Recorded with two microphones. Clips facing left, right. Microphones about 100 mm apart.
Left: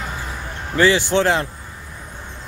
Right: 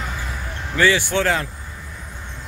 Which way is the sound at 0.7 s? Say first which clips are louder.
Left 2 dB; 25° left (ahead or behind).